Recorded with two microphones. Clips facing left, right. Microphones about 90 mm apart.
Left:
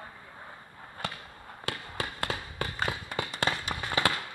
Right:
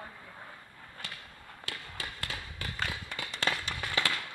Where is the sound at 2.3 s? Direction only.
45° left (ahead or behind).